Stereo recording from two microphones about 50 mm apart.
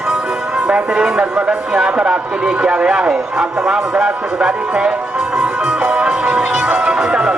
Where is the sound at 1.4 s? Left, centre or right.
Centre.